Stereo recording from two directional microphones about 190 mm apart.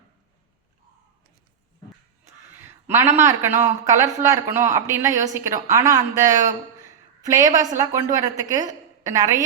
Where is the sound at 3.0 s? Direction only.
40° right (ahead or behind).